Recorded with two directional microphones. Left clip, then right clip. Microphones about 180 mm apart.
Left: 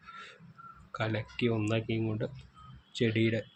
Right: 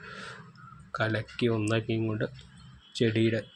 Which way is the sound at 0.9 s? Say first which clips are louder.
Right 4 dB; 15° right (ahead or behind).